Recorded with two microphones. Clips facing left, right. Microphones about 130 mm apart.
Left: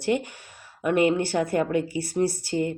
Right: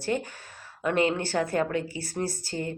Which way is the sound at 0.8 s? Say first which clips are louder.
Left 4 dB; 15° left (ahead or behind).